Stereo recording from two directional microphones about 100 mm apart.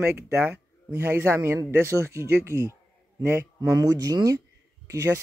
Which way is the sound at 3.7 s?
40° right (ahead or behind).